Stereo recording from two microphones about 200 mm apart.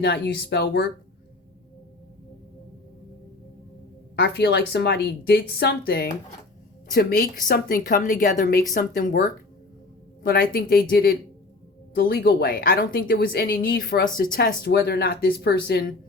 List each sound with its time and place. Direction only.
0.0 s a woman's voice: 50° left (ahead or behind)
4.1 s a woman's voice: 55° left (ahead or behind)